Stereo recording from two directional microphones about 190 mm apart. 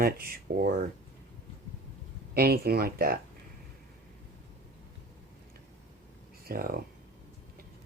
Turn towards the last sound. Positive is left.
turn(degrees=-50)  # may be behind; listen again after turning